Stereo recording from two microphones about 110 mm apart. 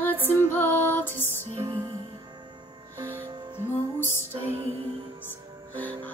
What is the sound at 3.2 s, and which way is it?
Music, 45° right (ahead or behind).